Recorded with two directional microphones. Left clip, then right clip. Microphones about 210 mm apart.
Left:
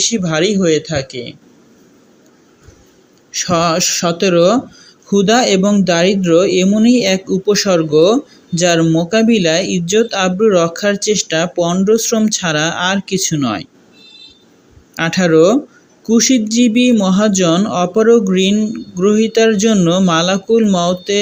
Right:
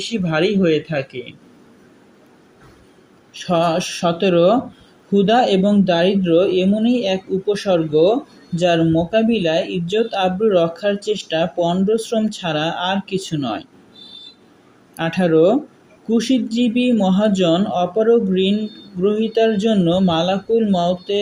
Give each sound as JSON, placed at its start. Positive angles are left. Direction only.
{"t": 0.1, "sound": "speech", "side_deg": 20}
{"t": 3.3, "sound": "speech", "side_deg": 25}
{"t": 14.9, "sound": "speech", "side_deg": 25}